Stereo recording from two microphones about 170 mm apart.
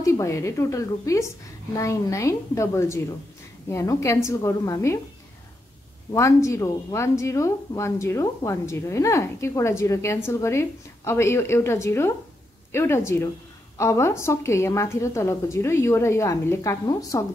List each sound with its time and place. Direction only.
0.0 s a woman's voice: 15° left (ahead or behind)
6.1 s a woman's voice: 15° left (ahead or behind)